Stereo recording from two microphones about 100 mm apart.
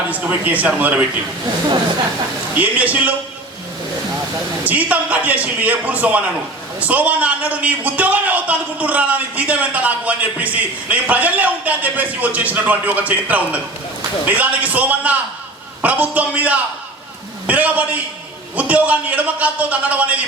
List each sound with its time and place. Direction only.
0.1 s a man's voice: 15° right (ahead or behind)
2.6 s a man's voice: 15° right (ahead or behind)
4.6 s a man's voice: 15° right (ahead or behind)